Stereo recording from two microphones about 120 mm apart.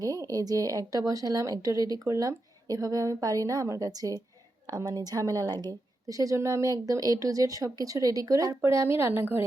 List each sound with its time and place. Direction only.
0.0 s speech: 30° right (ahead or behind)